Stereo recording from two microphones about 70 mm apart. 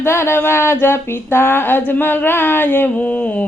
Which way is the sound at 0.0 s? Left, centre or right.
Left.